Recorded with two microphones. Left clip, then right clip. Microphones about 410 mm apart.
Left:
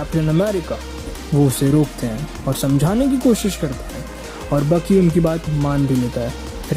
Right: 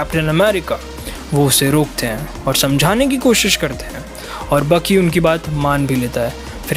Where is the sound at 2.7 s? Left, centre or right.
Right.